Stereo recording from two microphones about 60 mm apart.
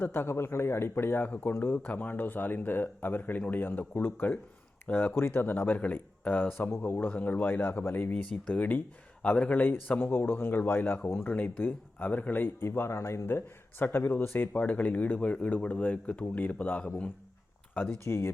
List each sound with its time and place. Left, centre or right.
0.0 s speech: left
1.9 s speech: left
5.1 s speech: left
8.1 s speech: left
12.6 s speech: left
18.0 s speech: left